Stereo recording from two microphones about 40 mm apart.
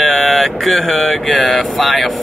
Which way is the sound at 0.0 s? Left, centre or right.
Centre.